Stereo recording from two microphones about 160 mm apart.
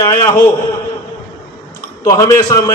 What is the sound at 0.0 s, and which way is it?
Speech, 20° left (ahead or behind).